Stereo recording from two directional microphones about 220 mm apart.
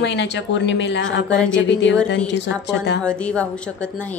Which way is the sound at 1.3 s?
5° left (ahead or behind).